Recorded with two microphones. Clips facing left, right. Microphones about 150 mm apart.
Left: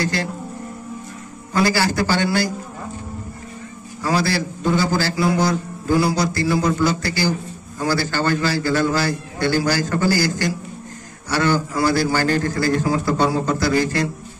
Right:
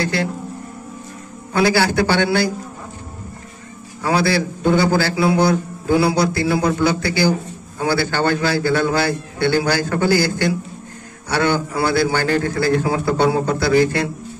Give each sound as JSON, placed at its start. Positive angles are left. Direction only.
{"t": 1.5, "sound": "a man's voice", "side_deg": -65}
{"t": 4.0, "sound": "a man's voice", "side_deg": -60}